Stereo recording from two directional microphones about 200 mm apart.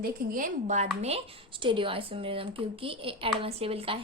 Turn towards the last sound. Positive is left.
turn(degrees=-30)  # may be behind; listen again after turning